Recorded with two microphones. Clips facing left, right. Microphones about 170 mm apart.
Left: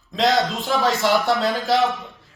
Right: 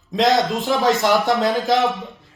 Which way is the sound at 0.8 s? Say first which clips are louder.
Right 2 dB; 15° right (ahead or behind).